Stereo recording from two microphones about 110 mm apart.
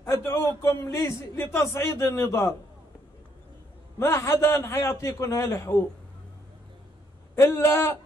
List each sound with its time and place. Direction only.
0.0 s a sound: 25° left (ahead or behind)
0.6 s a man's voice: 25° left (ahead or behind)
4.0 s a man's voice: 25° left (ahead or behind)
7.3 s a man's voice: 25° left (ahead or behind)